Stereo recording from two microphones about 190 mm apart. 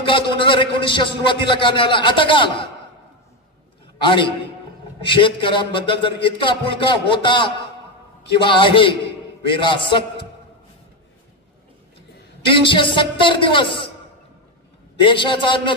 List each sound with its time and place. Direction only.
0.0 s a man's voice: 25° left (ahead or behind)
4.0 s a man's voice: 25° left (ahead or behind)
12.4 s a man's voice: 25° left (ahead or behind)
15.0 s a man's voice: 25° left (ahead or behind)